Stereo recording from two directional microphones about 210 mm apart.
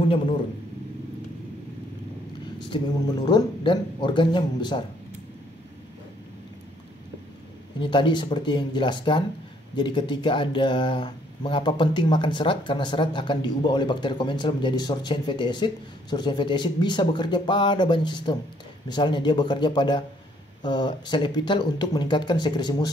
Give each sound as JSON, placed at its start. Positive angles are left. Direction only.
{"t": 2.7, "sound": "speech", "side_deg": 20}
{"t": 7.8, "sound": "speech", "side_deg": 25}